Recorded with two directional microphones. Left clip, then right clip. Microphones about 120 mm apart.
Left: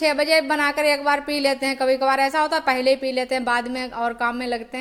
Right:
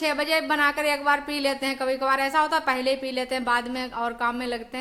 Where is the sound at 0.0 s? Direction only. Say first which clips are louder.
Left 5 dB; 30° left (ahead or behind).